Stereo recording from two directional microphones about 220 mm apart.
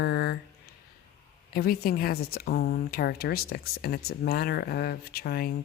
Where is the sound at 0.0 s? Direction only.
50° left (ahead or behind).